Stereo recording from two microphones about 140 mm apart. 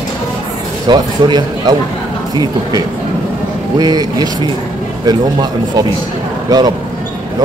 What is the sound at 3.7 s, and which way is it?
A man's voice, 30° right (ahead or behind).